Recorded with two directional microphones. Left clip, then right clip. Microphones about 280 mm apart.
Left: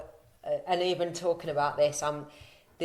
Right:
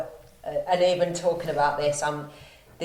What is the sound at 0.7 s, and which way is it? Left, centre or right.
A woman's voice, left.